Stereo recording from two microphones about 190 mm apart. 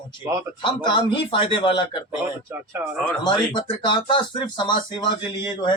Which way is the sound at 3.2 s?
25° left (ahead or behind).